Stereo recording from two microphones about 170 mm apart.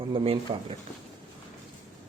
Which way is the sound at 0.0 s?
30° right (ahead or behind).